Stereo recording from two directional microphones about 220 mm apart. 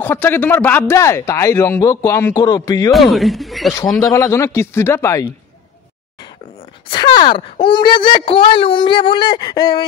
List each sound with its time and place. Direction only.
0.0 s a man's voice: 10° left (ahead or behind)
2.9 s speech: centre (ahead or behind)
4.0 s a man's voice: 15° left (ahead or behind)
6.9 s speech: 20° left (ahead or behind)